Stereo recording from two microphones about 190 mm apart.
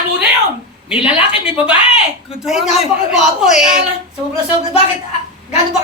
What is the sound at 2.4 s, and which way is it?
Speech, centre (ahead or behind).